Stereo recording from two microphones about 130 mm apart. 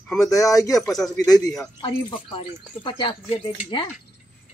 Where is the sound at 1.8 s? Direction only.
40° left (ahead or behind).